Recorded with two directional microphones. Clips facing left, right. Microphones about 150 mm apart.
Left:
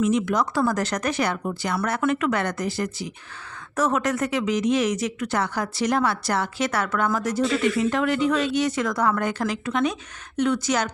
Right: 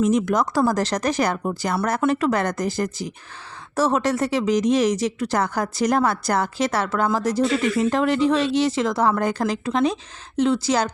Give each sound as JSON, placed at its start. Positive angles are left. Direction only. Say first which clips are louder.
{"t": 0.0, "sound": "speech", "louder": "right 2 dB", "side_deg": -45}
{"t": 3.8, "sound": "speech", "louder": "right 3 dB", "side_deg": -30}